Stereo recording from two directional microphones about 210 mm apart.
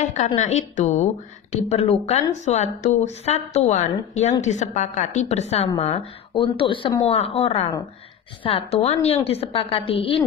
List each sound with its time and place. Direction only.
0.0 s a woman's voice: 35° left (ahead or behind)